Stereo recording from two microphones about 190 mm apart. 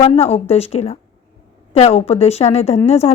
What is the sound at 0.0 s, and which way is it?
A woman's voice, 30° left (ahead or behind).